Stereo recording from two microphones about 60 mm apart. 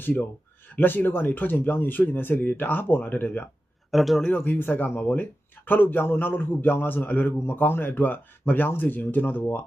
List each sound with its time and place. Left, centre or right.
0.0 s speech: left
3.9 s speech: centre
4.4 s speech: left